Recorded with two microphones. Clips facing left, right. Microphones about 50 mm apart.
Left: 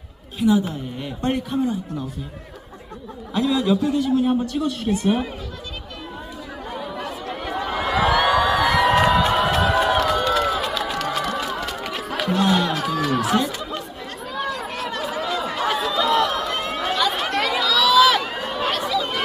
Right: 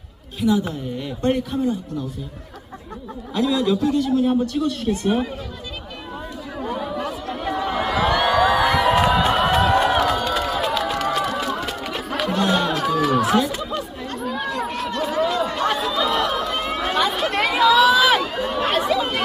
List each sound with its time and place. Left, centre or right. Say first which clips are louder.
0.3 s a man's voice: left 1 dB; centre
3.3 s speech: even; centre
6.6 s chatter: right 5 dB; centre
6.9 s crowd: right 3 dB; centre
9.1 s a sound: right 1 dB; centre
13.6 s chatter: right 3 dB; centre
17.4 s chatter: right 6 dB; centre
18.2 s run: right 3 dB; centre